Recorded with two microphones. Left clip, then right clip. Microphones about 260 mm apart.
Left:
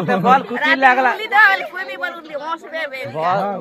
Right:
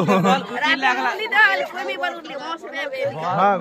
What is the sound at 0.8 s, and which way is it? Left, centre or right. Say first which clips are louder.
Speech: left 7 dB; left.